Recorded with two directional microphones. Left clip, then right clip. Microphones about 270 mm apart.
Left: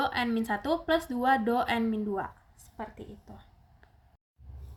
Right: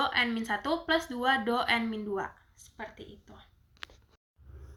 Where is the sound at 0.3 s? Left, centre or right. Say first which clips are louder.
Left 1 dB; left.